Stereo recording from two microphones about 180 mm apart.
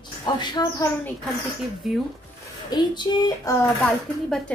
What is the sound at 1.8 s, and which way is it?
Speech, centre (ahead or behind).